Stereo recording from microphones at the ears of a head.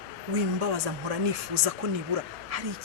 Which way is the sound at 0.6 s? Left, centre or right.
Left.